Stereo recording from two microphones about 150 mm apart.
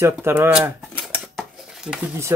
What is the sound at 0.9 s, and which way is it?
Dishes, centre (ahead or behind).